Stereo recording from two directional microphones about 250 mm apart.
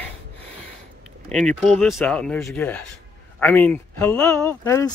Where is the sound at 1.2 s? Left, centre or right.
Centre.